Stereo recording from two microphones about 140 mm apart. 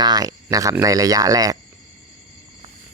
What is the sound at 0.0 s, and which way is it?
Speech, 25° right (ahead or behind).